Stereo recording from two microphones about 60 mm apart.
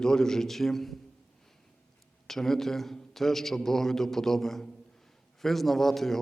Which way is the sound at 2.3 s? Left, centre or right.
Centre.